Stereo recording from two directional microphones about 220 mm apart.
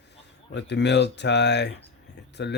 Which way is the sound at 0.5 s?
50° left (ahead or behind).